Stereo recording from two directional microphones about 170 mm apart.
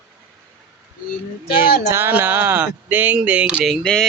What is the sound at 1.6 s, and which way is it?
Speech, 15° right (ahead or behind).